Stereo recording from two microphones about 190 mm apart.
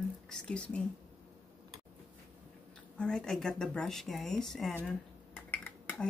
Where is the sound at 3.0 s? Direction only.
5° left (ahead or behind).